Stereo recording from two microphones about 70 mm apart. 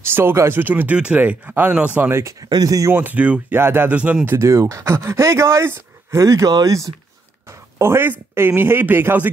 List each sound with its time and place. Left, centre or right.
0.0 s speech: right
0.9 s speech: centre; by 2.3 s right
2.5 s speech: right
2.9 s speech: right
3.9 s speech: centre
4.4 s speech: right
7.8 s speech: right